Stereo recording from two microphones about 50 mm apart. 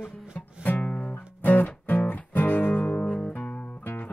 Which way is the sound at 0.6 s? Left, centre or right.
Left.